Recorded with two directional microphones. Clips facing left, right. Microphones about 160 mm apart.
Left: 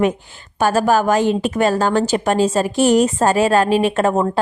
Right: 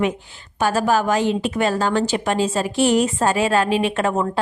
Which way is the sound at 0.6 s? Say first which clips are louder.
Left 3 dB; 45° left (ahead or behind).